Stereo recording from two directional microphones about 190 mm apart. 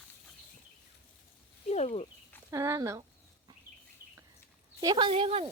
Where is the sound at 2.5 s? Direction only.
15° right (ahead or behind).